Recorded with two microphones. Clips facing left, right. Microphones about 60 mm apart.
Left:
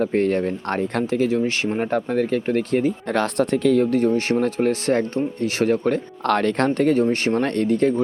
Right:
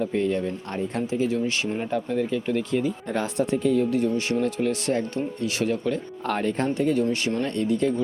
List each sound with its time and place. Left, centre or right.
0.0 s speech: left
1.4 s speech: left
1.9 s speech: left
3.1 s speech: left
6.2 s speech: left
6.7 s speech: left
7.0 s speech: left
7.4 s speech: left